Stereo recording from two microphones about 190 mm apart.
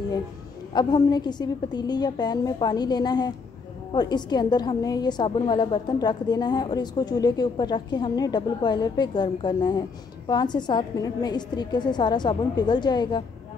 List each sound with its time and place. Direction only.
0.7 s a woman's voice: 20° left (ahead or behind)